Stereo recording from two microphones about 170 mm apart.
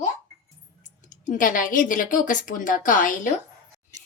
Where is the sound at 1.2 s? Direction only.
50° left (ahead or behind).